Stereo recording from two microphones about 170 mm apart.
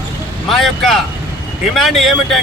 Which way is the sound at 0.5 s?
Centre (ahead or behind).